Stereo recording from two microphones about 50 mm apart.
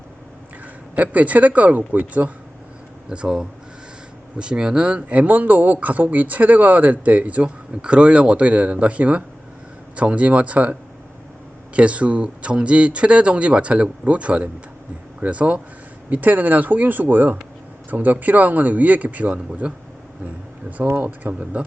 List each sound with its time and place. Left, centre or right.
0.9 s speech: right
3.1 s speech: centre
20.8 s speech: right
21.5 s a man's voice: right